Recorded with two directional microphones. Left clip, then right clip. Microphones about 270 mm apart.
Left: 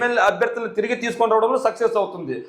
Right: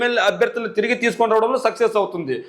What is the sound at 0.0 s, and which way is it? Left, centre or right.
A man's voice, right.